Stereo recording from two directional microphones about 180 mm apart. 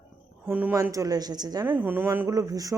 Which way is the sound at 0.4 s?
10° right (ahead or behind).